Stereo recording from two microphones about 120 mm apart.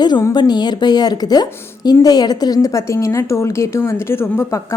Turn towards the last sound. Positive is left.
turn(degrees=20)  # may be behind; listen again after turning